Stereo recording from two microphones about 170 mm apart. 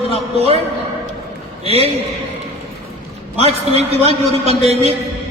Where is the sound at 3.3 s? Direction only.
40° right (ahead or behind).